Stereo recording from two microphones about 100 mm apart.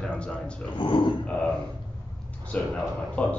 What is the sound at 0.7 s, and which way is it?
Speech, 55° left (ahead or behind).